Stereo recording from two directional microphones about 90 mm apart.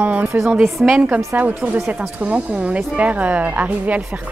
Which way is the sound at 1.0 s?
15° right (ahead or behind).